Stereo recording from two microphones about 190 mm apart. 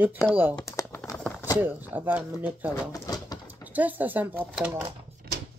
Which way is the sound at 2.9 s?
20° left (ahead or behind).